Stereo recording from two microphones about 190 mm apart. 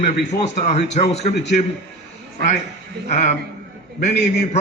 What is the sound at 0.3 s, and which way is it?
A man's voice, 35° left (ahead or behind).